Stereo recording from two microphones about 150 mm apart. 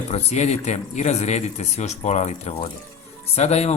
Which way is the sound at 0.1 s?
45° left (ahead or behind).